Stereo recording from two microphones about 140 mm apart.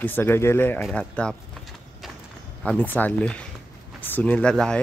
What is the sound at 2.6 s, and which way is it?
Speech, 10° left (ahead or behind).